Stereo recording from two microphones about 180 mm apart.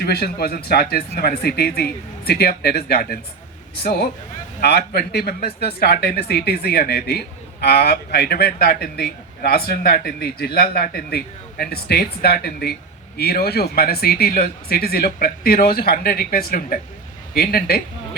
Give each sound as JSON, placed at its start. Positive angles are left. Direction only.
{"t": 0.0, "sound": "speech", "side_deg": 60}